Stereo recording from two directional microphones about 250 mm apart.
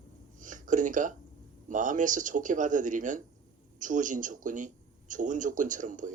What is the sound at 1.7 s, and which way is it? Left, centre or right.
A man's voice, right.